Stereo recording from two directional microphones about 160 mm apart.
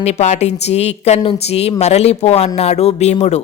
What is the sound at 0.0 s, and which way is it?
A woman's voice, 45° left (ahead or behind).